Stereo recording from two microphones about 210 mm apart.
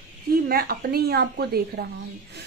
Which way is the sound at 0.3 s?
45° right (ahead or behind).